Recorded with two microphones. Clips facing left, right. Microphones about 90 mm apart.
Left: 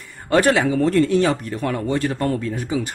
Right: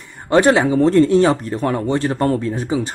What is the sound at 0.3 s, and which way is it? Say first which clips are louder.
Speech: right 3 dB; 25° right (ahead or behind).